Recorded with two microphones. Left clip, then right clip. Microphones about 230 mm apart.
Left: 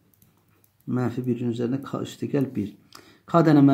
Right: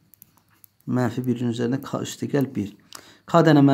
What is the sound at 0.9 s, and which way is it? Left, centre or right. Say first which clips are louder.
Speech: right 2 dB; right.